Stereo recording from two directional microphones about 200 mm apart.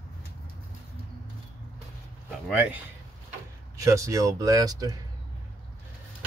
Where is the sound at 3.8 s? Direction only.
15° right (ahead or behind).